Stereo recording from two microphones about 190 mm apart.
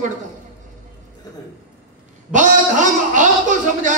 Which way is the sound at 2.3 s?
40° right (ahead or behind).